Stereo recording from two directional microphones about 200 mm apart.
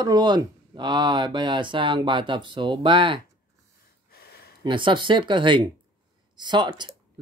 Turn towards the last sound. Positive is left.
turn(degrees=-20)  # may be behind; listen again after turning